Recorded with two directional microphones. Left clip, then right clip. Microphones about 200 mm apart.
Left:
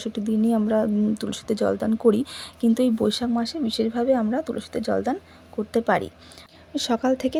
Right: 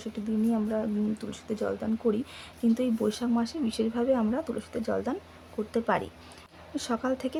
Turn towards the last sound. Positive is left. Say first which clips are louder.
# left 7 dB
turn(degrees=20)  # may be behind; listen again after turning